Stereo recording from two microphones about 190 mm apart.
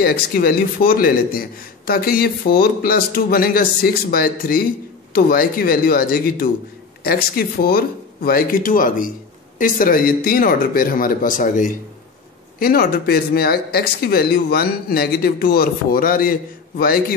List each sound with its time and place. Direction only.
0.0 s speech: 55° left (ahead or behind)